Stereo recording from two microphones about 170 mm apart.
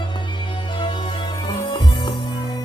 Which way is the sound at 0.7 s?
25° left (ahead or behind).